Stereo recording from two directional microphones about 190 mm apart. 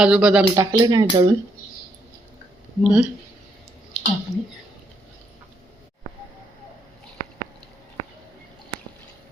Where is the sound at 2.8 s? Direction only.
5° right (ahead or behind).